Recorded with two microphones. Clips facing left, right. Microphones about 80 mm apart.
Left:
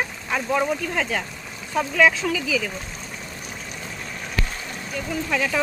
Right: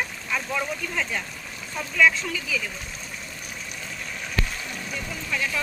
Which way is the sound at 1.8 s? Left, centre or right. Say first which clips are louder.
Left 3 dB; left.